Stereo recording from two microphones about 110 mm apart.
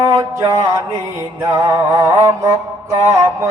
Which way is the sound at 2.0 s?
30° right (ahead or behind).